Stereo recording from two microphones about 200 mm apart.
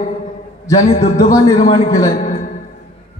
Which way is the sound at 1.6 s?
20° left (ahead or behind).